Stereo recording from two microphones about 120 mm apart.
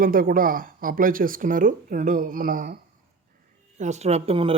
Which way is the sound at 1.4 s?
90° right.